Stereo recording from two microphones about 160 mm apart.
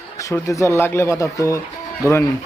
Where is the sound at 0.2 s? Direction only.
20° left (ahead or behind).